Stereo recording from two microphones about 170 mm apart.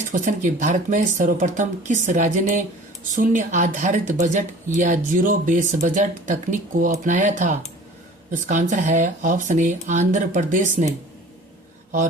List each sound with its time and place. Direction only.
0.1 s speech: 50° right (ahead or behind)